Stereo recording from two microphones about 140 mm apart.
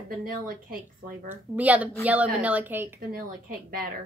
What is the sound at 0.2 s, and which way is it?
Speech, 90° right.